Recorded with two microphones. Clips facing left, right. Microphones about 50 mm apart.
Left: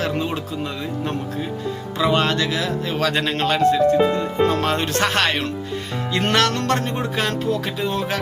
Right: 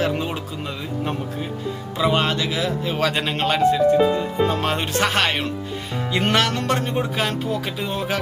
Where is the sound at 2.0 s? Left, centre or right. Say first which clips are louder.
Left 1 dB; centre.